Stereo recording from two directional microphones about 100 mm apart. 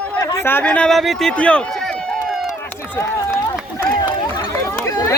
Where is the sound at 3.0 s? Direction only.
30° left (ahead or behind).